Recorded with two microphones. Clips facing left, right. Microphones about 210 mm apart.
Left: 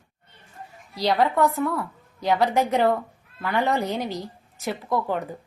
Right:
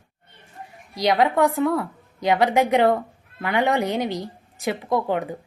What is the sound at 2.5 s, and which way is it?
A woman's voice, 15° right (ahead or behind).